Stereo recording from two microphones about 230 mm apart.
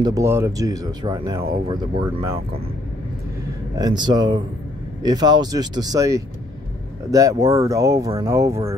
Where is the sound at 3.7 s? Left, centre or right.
Centre.